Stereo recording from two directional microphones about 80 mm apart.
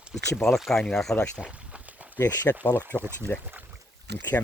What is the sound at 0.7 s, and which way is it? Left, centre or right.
Speech, centre.